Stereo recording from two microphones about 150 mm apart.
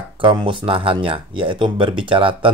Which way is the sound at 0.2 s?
35° right (ahead or behind).